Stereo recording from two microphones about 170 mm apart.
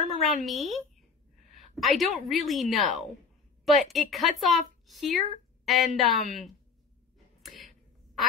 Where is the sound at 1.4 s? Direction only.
45° right (ahead or behind).